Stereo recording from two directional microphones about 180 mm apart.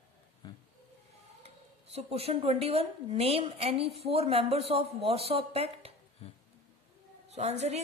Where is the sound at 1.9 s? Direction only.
35° right (ahead or behind).